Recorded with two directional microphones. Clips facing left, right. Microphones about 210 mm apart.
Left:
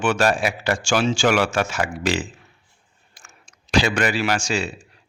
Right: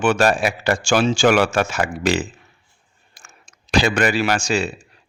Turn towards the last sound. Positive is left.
turn(degrees=-50)  # may be behind; listen again after turning